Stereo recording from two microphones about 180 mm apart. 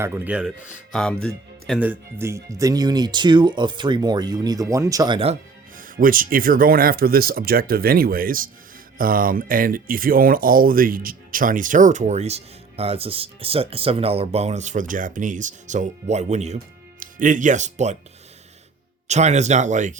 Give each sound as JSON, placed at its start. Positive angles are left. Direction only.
{"t": 0.0, "sound": "speech", "side_deg": -10}
{"t": 1.8, "sound": "speech", "side_deg": -10}
{"t": 5.7, "sound": "speech", "side_deg": -50}
{"t": 19.0, "sound": "speech", "side_deg": -40}